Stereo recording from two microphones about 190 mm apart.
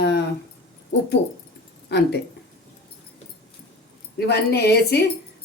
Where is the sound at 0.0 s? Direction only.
60° left (ahead or behind).